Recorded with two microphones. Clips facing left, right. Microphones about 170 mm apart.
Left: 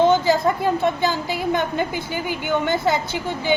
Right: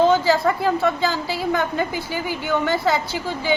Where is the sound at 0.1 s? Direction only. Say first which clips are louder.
Even; 20° left (ahead or behind).